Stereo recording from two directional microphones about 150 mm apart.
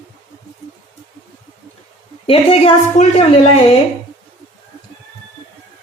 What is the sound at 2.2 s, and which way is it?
Speech, 40° left (ahead or behind).